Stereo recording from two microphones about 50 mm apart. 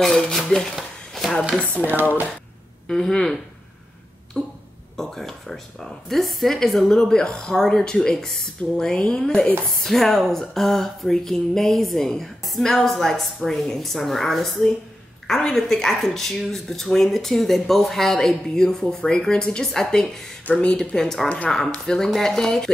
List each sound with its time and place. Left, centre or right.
0.0 s speech: centre
0.7 s a sound: centre
1.9 s speech: right
2.9 s speech: centre
4.4 s speech: centre
9.7 s a woman's voice: centre